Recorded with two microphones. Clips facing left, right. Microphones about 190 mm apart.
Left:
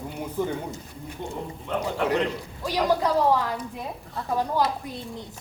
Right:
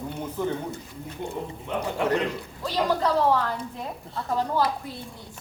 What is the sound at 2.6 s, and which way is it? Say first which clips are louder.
Speech: left 1 dB; 10° left (ahead or behind).